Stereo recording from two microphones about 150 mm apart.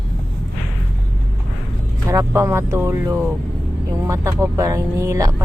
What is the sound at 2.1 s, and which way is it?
Speech, 20° right (ahead or behind).